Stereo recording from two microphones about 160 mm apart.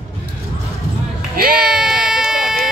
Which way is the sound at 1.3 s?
70° right (ahead or behind).